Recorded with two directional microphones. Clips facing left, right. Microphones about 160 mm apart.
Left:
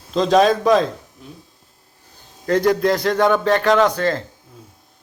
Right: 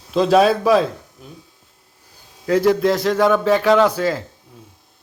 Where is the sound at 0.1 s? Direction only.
5° right (ahead or behind).